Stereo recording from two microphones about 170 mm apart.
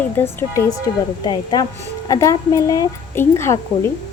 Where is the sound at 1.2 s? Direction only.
25° left (ahead or behind).